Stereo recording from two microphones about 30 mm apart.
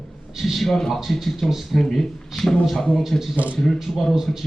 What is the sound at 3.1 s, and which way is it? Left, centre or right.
Speech, left.